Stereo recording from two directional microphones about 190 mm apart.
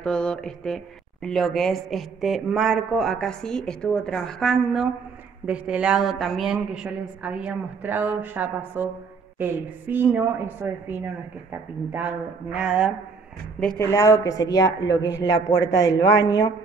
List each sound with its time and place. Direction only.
0.0 s a woman's voice: 5° left (ahead or behind)
13.7 s speech: 15° left (ahead or behind)